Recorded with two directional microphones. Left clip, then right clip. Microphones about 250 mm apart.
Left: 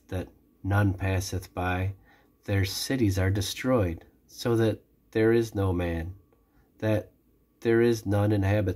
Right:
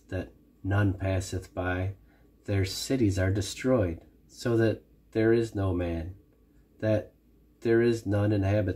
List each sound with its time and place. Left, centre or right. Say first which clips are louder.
0.0 s speech: even; left
7.6 s speech: left 1 dB; centre